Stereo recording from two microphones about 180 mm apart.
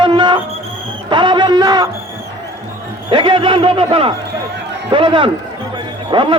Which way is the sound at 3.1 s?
30° right (ahead or behind).